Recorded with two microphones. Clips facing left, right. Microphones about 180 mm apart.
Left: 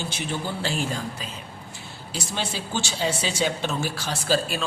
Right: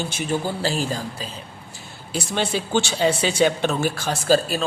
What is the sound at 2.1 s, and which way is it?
A man's voice, 60° right (ahead or behind).